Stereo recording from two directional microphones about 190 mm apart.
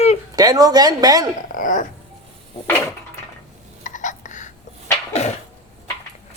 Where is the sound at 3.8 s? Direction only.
40° left (ahead or behind).